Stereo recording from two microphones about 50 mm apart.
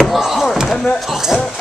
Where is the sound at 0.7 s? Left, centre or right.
Centre.